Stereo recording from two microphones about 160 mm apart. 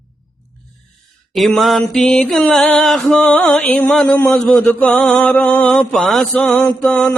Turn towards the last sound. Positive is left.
turn(degrees=10)  # may be behind; listen again after turning